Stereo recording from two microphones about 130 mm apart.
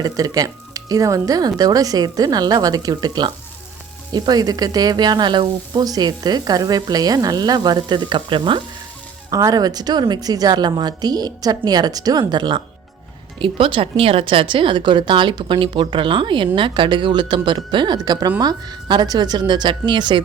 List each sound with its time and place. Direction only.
0.0 s speech: 30° right (ahead or behind)
9.3 s speech: 25° right (ahead or behind)